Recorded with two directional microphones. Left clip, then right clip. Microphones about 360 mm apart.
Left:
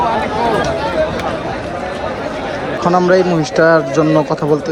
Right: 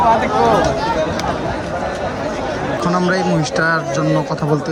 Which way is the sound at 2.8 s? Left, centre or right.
Centre.